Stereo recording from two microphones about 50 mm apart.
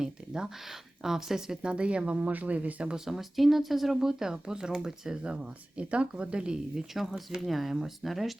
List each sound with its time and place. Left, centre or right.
0.0 s speech: centre
1.6 s speech: right
2.9 s speech: centre
7.0 s speech: centre